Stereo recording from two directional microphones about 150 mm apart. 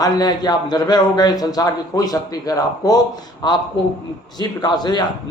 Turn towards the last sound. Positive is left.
turn(degrees=30)  # may be behind; listen again after turning